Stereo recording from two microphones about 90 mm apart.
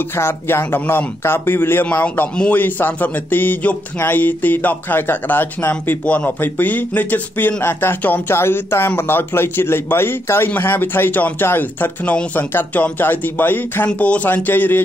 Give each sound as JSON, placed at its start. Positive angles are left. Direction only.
{"t": 0.1, "sound": "a man's voice", "side_deg": 25}